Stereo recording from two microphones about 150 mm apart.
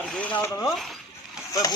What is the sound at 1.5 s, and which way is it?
Speech, 25° left (ahead or behind).